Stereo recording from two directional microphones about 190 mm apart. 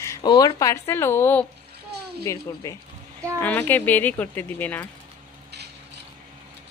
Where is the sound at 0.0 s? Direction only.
20° left (ahead or behind).